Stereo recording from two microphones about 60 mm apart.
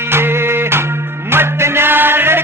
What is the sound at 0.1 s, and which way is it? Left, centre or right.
Music, right.